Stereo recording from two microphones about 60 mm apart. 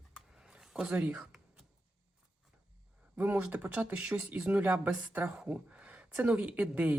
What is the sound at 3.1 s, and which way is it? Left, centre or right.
A woman's voice, right.